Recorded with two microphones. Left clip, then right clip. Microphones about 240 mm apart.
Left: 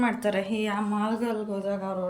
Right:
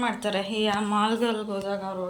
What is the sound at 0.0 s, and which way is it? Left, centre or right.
A woman's voice, centre.